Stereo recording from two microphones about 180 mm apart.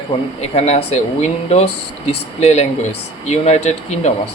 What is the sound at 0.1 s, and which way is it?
Speech, 35° left (ahead or behind).